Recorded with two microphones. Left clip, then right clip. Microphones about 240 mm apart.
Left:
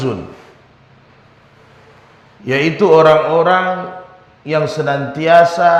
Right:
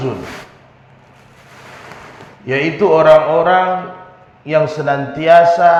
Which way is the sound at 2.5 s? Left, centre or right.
Left.